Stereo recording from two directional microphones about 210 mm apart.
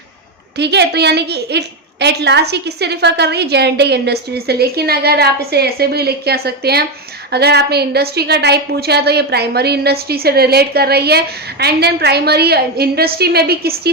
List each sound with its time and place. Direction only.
0.6 s a woman's voice: 55° right (ahead or behind)